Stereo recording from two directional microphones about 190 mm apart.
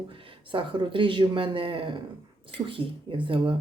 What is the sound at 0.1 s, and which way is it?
Speech, 30° right (ahead or behind).